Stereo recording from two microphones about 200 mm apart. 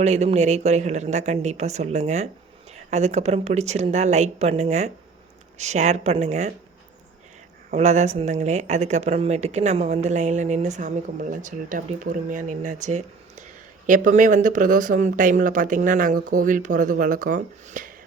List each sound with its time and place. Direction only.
0.0 s speech: 35° right (ahead or behind)
7.7 s speech: 35° right (ahead or behind)